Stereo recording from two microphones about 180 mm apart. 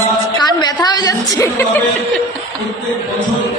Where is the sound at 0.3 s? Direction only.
25° left (ahead or behind).